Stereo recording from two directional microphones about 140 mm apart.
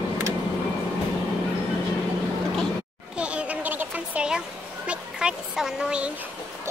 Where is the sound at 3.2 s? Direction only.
10° right (ahead or behind).